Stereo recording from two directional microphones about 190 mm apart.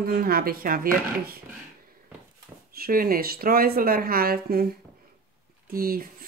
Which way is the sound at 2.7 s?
50° right (ahead or behind).